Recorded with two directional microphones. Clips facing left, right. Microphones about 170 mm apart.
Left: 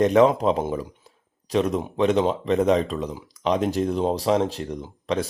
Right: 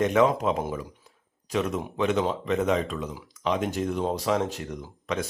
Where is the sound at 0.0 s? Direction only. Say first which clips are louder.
Left 5 dB; 35° left (ahead or behind).